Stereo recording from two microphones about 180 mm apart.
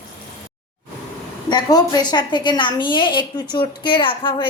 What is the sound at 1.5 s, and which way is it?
A woman's voice, 20° left (ahead or behind).